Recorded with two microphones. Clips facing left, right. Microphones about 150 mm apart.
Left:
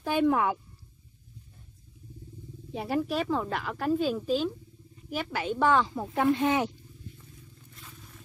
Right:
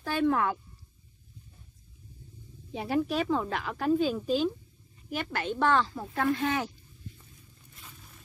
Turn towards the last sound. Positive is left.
turn(degrees=20)  # may be behind; listen again after turning